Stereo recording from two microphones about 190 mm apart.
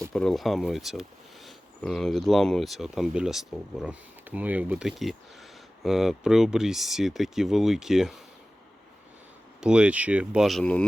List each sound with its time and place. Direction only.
0.1 s speech: centre (ahead or behind)
9.6 s speech: 5° right (ahead or behind)